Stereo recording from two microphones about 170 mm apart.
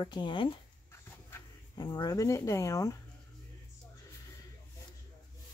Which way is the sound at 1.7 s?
25° left (ahead or behind).